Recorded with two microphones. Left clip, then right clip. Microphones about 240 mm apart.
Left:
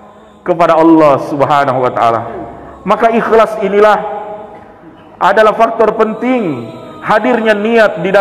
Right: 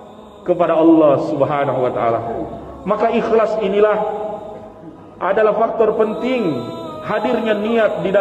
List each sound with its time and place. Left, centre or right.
0.5 s a man's voice: left
5.2 s a man's voice: left